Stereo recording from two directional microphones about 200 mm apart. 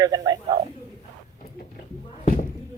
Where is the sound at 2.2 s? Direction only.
40° left (ahead or behind).